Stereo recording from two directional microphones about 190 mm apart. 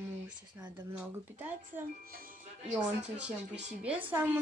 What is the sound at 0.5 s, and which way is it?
Speech, 10° right (ahead or behind).